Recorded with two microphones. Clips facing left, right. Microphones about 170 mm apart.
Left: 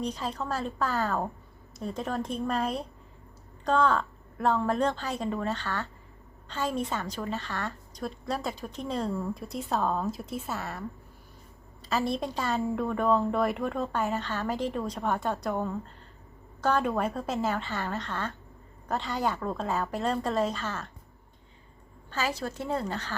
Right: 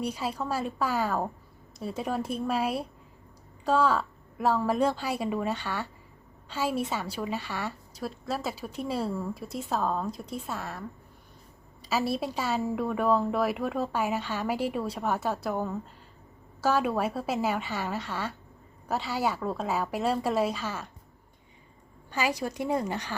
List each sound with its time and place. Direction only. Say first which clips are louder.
0.0 s a woman's voice: right 1 dB; 10° right (ahead or behind)
22.1 s a woman's voice: right 2 dB; 15° right (ahead or behind)